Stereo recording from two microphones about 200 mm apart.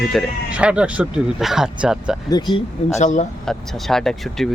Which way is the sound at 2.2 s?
20° left (ahead or behind).